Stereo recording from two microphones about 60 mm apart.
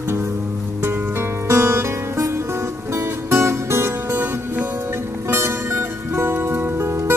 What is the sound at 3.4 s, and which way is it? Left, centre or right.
Music, right.